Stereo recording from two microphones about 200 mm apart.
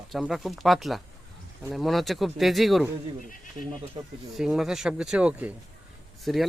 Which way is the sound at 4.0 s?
25° right (ahead or behind).